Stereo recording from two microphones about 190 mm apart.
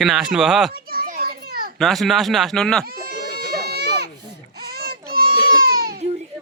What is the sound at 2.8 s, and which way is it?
Goat, 55° right (ahead or behind).